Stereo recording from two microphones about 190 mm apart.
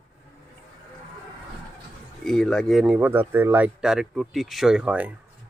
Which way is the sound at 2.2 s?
Centre (ahead or behind).